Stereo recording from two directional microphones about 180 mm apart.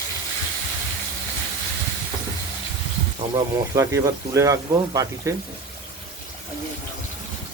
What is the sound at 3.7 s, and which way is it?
Speech, 20° right (ahead or behind).